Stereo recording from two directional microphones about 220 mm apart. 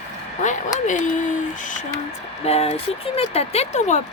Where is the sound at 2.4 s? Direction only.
30° left (ahead or behind).